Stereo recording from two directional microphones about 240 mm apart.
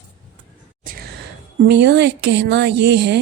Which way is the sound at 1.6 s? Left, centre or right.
Right.